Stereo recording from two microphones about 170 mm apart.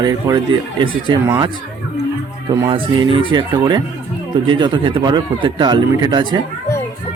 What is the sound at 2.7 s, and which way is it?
Speech, 30° right (ahead or behind).